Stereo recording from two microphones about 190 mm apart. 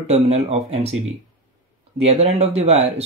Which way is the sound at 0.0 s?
35° right (ahead or behind).